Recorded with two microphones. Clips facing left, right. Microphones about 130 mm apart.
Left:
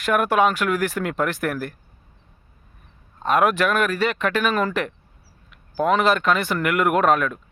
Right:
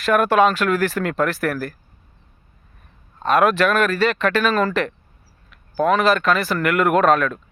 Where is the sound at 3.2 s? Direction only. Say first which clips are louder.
Right 2 dB; 15° left (ahead or behind).